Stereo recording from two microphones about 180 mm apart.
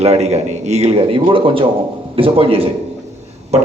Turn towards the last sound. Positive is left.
turn(degrees=-35)  # may be behind; listen again after turning